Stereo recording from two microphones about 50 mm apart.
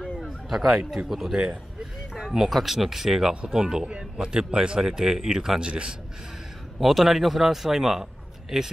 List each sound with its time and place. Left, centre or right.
0.2 s a man's voice: centre; by 5.9 s right
6.8 s a man's voice: centre